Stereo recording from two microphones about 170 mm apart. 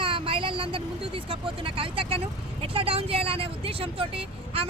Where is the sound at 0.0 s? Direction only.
30° right (ahead or behind).